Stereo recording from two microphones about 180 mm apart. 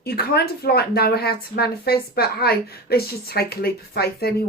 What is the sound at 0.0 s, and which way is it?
Speech, 60° left (ahead or behind).